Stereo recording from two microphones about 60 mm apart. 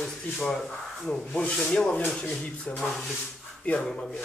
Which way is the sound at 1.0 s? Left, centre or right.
Centre.